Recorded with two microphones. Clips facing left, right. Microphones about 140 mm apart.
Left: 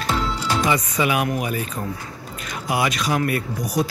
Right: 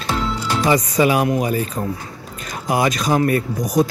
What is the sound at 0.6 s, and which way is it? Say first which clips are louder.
Speech: right 7 dB; 40° right (ahead or behind).